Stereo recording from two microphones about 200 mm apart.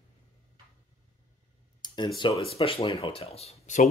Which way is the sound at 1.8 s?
20° left (ahead or behind).